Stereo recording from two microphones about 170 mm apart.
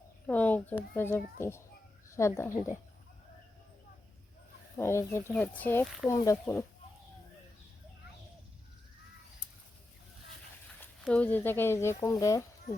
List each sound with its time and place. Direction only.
0.3 s speech: 10° left (ahead or behind)
4.8 s speech: 15° left (ahead or behind)
11.0 s speech: 5° left (ahead or behind)